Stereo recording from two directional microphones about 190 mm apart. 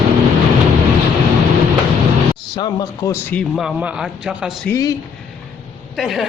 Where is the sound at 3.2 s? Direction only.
5° left (ahead or behind).